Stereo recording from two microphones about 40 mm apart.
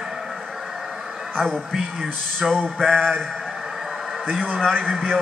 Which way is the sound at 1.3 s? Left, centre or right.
Centre.